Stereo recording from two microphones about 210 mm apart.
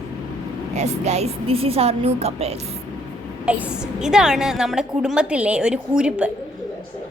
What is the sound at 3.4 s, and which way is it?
A woman's voice, 5° right (ahead or behind).